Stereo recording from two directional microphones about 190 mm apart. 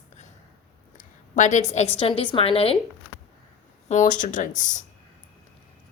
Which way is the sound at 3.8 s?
40° left (ahead or behind).